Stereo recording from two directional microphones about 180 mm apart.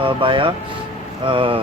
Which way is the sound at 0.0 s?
30° right (ahead or behind).